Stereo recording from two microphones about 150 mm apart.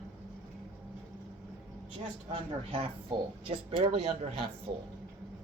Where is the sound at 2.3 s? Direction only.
35° right (ahead or behind).